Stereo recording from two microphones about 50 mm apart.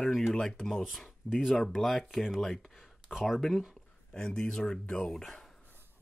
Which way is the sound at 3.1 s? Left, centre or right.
Centre.